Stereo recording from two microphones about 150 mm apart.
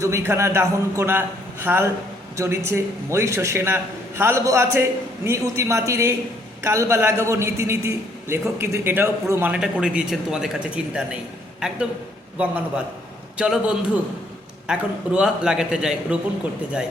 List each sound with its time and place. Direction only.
0.0 s a man's voice: 15° right (ahead or behind)
12.4 s a man's voice: 10° right (ahead or behind)